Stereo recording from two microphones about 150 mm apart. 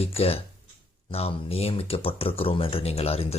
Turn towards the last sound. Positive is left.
turn(degrees=40)  # may be behind; listen again after turning